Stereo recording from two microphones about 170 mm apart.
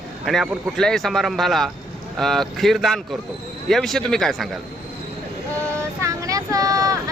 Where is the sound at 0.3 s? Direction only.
Centre (ahead or behind).